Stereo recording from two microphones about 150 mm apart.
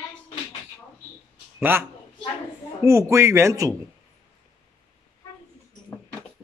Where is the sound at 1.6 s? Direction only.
15° right (ahead or behind).